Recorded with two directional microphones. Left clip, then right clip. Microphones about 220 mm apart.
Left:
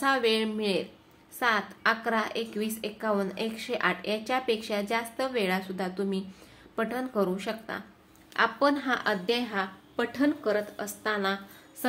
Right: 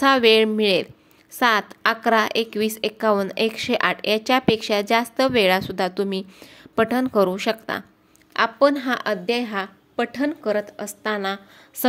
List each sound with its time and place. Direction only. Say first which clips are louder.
0.0 s a woman's voice: right 10 dB; 40° right (ahead or behind)